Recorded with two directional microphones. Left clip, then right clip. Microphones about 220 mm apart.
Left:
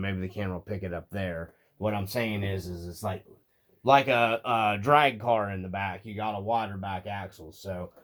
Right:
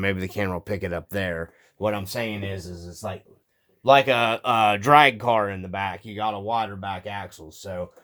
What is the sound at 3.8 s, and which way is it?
Speech, 40° right (ahead or behind).